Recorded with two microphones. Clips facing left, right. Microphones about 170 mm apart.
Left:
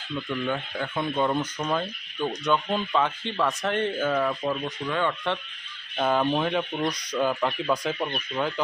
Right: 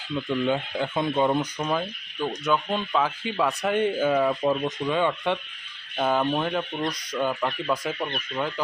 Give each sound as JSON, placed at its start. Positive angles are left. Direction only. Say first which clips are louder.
{"t": 0.3, "sound": "speech", "louder": "right 5 dB", "side_deg": -20}
{"t": 6.0, "sound": "speech", "louder": "even", "side_deg": -5}